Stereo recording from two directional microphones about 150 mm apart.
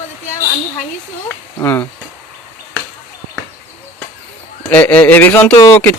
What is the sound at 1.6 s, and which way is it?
Speech, 15° left (ahead or behind).